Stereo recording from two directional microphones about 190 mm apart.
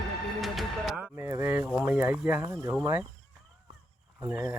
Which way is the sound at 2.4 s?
20° right (ahead or behind).